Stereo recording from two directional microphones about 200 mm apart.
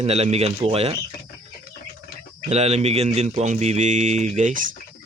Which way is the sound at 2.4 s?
30° right (ahead or behind).